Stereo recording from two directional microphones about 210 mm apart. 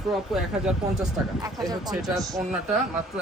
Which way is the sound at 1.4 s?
20° right (ahead or behind).